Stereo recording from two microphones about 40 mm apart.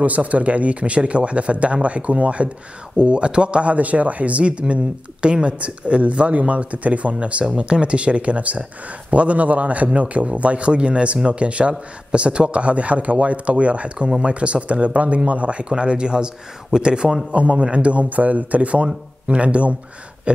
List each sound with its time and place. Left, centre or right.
0.0 s speech: right
15.7 s speech: right